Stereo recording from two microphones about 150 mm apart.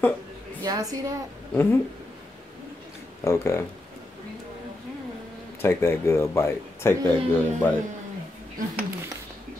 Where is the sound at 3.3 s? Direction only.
20° left (ahead or behind).